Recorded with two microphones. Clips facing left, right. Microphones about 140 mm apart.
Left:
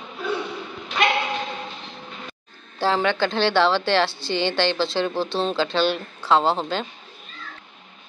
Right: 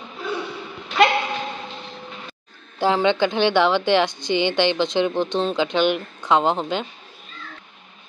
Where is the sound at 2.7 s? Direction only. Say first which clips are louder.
Right 3 dB; 20° right (ahead or behind).